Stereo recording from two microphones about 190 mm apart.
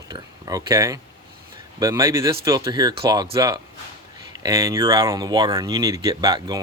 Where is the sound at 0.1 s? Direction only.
20° right (ahead or behind).